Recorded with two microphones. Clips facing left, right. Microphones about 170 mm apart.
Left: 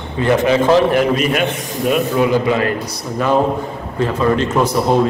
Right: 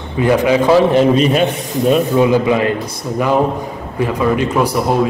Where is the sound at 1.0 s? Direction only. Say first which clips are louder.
Right 4 dB; 30° right (ahead or behind).